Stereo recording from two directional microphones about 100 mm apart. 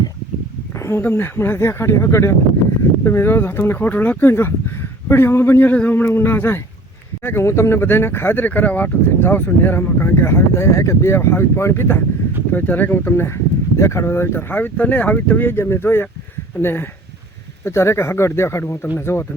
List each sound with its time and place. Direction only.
0.8 s speech: 25° left (ahead or behind)